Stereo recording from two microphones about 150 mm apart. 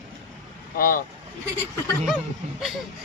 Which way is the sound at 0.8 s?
75° left (ahead or behind).